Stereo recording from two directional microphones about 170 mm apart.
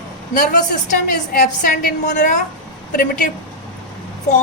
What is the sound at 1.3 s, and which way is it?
A woman's voice, 55° left (ahead or behind).